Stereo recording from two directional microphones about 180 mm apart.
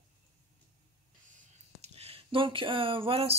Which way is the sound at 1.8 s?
35° right (ahead or behind).